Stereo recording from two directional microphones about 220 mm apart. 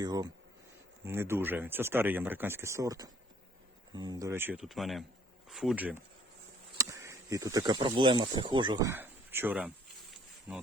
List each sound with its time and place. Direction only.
0.0 s speech: 15° right (ahead or behind)